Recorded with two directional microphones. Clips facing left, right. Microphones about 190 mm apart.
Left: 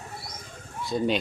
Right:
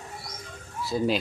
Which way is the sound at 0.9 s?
Centre (ahead or behind).